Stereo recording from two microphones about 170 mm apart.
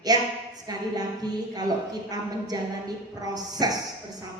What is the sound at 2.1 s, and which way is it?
A woman's voice, 20° right (ahead or behind).